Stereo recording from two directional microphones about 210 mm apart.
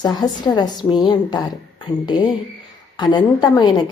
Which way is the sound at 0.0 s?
20° left (ahead or behind).